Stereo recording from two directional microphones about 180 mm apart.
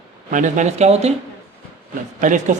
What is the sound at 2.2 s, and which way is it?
Speech, 45° right (ahead or behind).